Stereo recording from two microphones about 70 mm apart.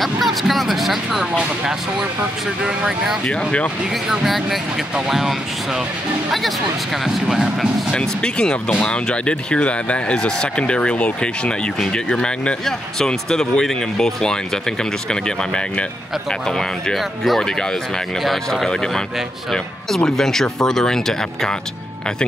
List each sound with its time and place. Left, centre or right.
0.0 s a sound: centre
2.6 s speech: centre
3.3 s speech: centre
4.1 s speech: centre
7.2 s speech: centre
7.9 s speech: centre